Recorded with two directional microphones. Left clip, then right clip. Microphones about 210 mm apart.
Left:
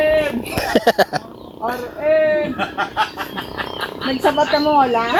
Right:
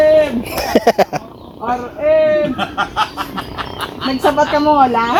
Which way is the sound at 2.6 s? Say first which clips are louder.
Right 3 dB; 45° right (ahead or behind).